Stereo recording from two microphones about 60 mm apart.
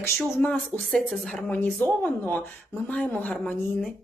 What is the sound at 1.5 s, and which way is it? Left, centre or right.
Speech, left.